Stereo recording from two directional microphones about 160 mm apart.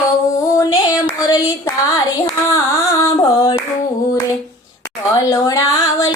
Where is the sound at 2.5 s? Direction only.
20° left (ahead or behind).